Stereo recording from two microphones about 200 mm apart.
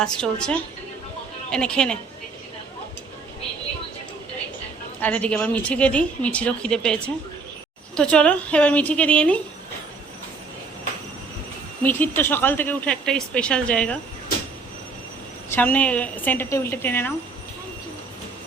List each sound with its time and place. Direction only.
0.0 s a woman's voice: 5° left (ahead or behind)
4.9 s speech: 5° left (ahead or behind)
11.8 s speech: 10° left (ahead or behind)
15.5 s speech: 10° left (ahead or behind)